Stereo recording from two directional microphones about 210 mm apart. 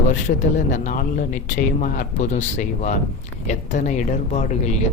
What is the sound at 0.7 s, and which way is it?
Speech, 40° left (ahead or behind).